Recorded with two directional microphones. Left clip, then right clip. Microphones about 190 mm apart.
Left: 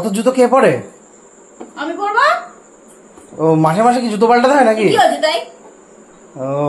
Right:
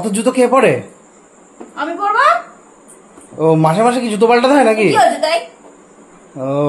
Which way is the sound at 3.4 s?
15° right (ahead or behind).